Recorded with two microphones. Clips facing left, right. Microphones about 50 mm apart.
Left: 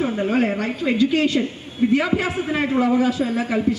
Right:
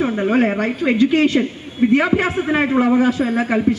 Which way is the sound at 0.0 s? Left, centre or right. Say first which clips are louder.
Right 3 dB; right.